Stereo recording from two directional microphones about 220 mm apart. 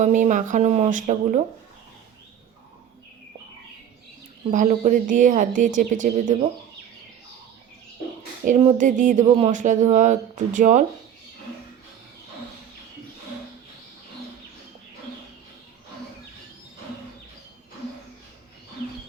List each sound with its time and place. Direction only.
0.0 s speech: 35° right (ahead or behind)
4.5 s speech: 35° right (ahead or behind)
8.4 s speech: 35° right (ahead or behind)